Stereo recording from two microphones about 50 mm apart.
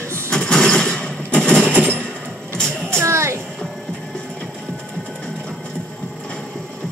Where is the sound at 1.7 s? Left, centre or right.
Right.